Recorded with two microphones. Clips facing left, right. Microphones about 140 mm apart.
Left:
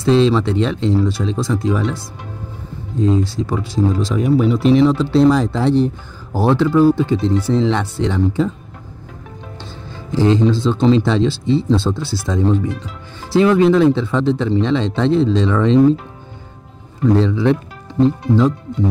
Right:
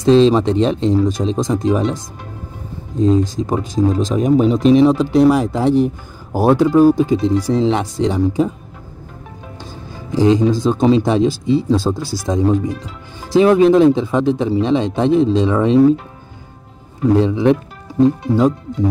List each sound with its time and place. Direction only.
0.0 s speech: 15° right (ahead or behind)
9.8 s speech: 15° right (ahead or behind)
17.0 s speech: 15° right (ahead or behind)